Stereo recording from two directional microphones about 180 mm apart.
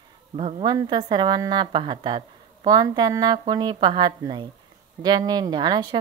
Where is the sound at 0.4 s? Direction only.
30° right (ahead or behind).